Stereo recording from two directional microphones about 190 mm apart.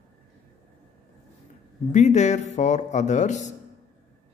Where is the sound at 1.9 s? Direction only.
40° left (ahead or behind).